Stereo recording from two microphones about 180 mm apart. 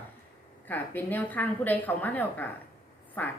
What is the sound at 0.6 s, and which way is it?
A woman's voice, 10° left (ahead or behind).